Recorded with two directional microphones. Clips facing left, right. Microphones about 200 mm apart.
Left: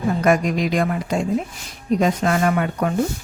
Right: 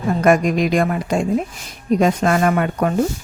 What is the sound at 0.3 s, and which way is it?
Speech, 50° right (ahead or behind).